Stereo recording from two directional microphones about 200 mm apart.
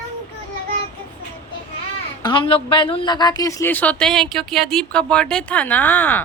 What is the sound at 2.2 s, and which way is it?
A woman's voice, 25° left (ahead or behind).